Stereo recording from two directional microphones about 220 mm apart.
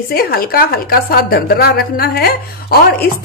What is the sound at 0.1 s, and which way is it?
A woman's voice, 40° left (ahead or behind).